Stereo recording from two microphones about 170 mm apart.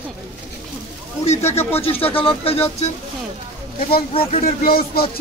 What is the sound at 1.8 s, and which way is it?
Speech, 35° left (ahead or behind).